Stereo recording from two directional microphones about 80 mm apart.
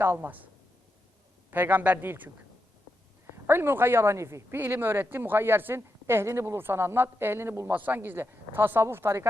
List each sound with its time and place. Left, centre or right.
0.0 s speech: right
1.5 s speech: right
3.3 s speech: right
7.7 s speech: right